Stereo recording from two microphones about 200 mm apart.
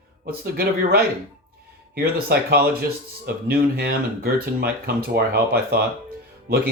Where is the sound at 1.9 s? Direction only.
50° right (ahead or behind).